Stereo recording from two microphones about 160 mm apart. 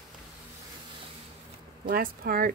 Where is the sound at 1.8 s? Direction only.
65° right (ahead or behind).